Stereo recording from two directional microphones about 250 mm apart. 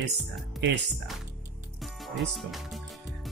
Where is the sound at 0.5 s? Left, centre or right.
Right.